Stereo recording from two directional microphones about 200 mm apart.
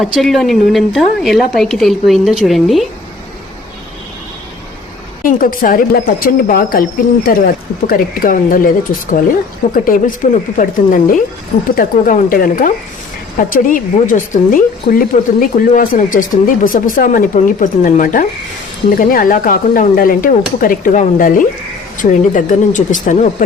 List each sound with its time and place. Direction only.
0.0 s a woman's voice: centre (ahead or behind)
5.2 s a woman's voice: 45° left (ahead or behind)